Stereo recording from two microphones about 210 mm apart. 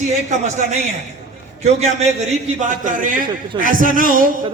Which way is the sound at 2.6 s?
35° right (ahead or behind).